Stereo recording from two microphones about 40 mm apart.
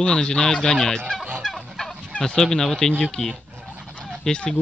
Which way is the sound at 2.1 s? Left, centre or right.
Centre.